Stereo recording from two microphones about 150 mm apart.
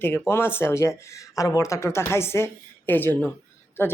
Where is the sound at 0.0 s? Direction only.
15° left (ahead or behind).